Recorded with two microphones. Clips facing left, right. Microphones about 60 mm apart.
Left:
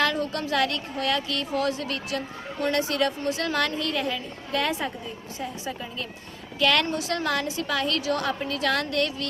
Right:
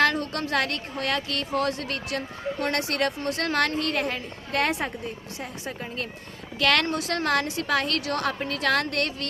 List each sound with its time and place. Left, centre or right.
0.0 s a woman's voice: right